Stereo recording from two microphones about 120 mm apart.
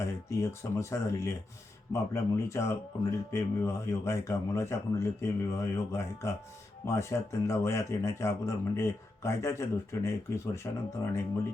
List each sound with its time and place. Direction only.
0.8 s speech: 25° left (ahead or behind)